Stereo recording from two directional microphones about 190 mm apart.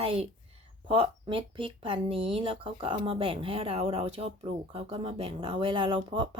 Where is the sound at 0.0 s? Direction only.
30° right (ahead or behind).